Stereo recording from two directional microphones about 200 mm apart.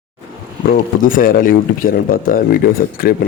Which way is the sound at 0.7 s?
45° left (ahead or behind).